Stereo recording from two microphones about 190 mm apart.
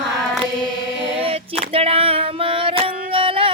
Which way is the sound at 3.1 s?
30° right (ahead or behind).